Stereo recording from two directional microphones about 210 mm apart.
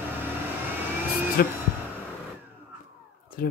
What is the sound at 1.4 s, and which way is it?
Speech, 45° left (ahead or behind).